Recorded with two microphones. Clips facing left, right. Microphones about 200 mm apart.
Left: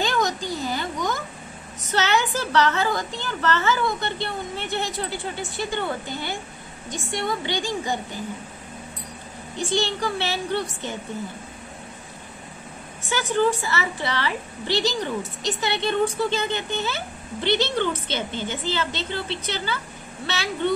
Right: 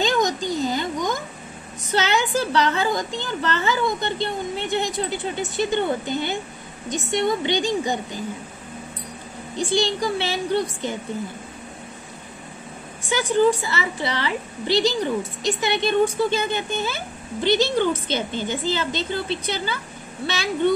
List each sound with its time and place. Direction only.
0.0 s a sound: 15° right (ahead or behind)
1.9 s a woman's voice: 15° right (ahead or behind)
9.7 s a woman's voice: 15° right (ahead or behind)
13.1 s a woman's voice: 15° right (ahead or behind)